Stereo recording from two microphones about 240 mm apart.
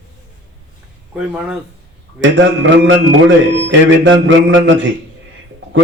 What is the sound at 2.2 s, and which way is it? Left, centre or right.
Music, right.